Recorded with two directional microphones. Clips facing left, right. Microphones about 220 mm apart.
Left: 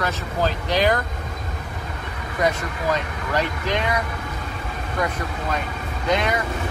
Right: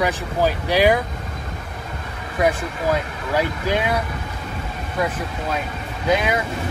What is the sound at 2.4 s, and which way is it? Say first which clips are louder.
Speech: right 3 dB; 5° right (ahead or behind).